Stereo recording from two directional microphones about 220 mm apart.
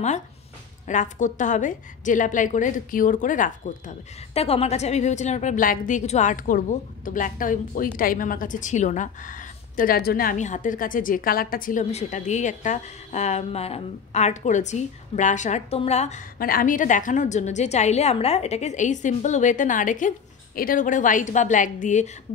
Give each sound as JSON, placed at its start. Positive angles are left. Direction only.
{"t": 0.8, "sound": "a woman's voice", "side_deg": 35}